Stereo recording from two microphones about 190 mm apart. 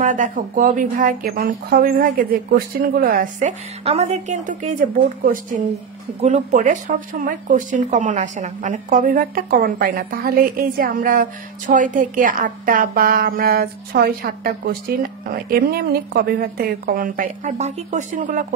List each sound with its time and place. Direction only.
0.0 s speech: 40° right (ahead or behind)
0.9 s speech: 50° right (ahead or behind)